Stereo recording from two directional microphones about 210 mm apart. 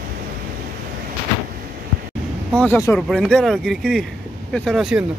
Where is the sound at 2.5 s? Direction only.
5° left (ahead or behind).